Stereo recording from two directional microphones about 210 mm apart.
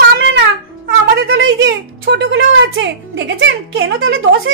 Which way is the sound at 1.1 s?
65° right (ahead or behind).